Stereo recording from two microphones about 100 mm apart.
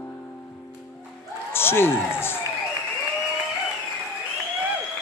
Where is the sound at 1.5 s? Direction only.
25° left (ahead or behind).